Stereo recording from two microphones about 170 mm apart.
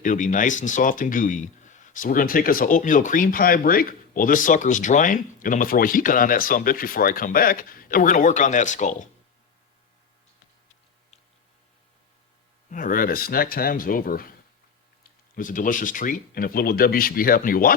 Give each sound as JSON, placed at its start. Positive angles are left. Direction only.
{"t": 0.0, "sound": "speech", "side_deg": 50}
{"t": 12.7, "sound": "speech", "side_deg": 55}
{"t": 15.4, "sound": "speech", "side_deg": 50}